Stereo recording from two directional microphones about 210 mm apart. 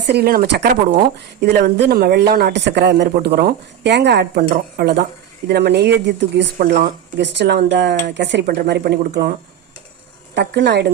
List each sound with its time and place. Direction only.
0.0 s speech: 50° right (ahead or behind)
10.3 s speech: 55° right (ahead or behind)